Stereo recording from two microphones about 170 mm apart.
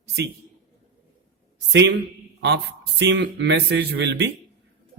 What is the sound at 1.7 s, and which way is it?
A man's voice, 90° right.